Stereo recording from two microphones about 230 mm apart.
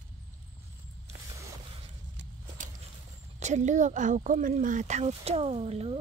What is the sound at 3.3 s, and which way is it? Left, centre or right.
Speech, right.